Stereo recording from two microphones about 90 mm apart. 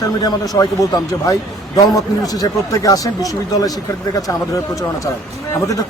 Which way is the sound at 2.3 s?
40° left (ahead or behind).